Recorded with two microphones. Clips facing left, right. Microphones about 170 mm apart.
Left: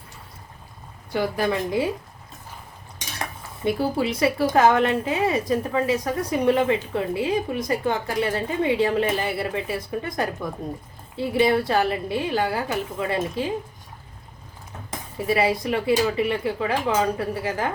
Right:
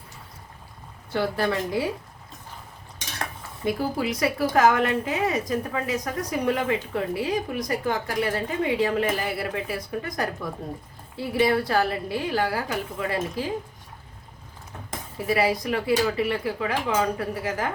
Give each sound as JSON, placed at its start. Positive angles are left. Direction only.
{"t": 1.1, "sound": "a woman's voice", "side_deg": 15}
{"t": 3.6, "sound": "speech", "side_deg": 25}
{"t": 15.3, "sound": "speech", "side_deg": 25}